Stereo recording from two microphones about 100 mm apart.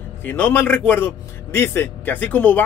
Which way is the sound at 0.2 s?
15° left (ahead or behind).